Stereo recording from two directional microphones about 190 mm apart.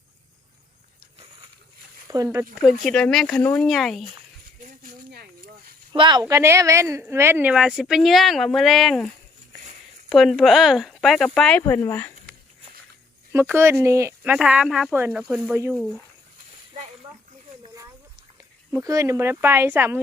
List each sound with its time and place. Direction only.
2.0 s speech: 15° right (ahead or behind)
2.6 s speech: centre (ahead or behind)
4.6 s a sound: 50° right (ahead or behind)
5.9 s speech: 25° right (ahead or behind); by 9.0 s centre (ahead or behind)
10.1 s speech: centre (ahead or behind)
13.3 s speech: 10° right (ahead or behind)
14.3 s speech: 5° right (ahead or behind)
18.7 s speech: 15° right (ahead or behind)